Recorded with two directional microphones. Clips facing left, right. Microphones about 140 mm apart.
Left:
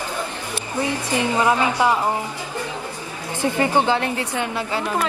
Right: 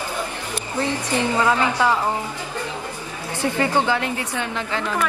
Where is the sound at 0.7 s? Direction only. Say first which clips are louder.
Even; 15° left (ahead or behind).